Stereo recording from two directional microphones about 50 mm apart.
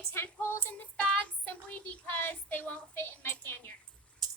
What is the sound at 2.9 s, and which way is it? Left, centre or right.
Speech, left.